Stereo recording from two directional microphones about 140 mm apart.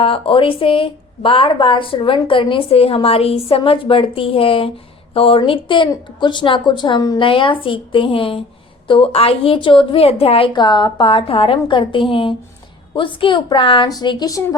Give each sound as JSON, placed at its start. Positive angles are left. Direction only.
{"t": 0.0, "sound": "a woman's voice", "side_deg": 40}